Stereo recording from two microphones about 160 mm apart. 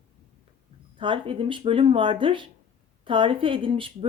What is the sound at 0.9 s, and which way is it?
Speech, 30° right (ahead or behind).